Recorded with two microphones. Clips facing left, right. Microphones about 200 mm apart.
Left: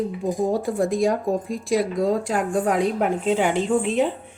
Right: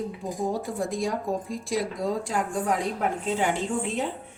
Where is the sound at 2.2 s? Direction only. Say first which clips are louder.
Left 5 dB; 65° left (ahead or behind).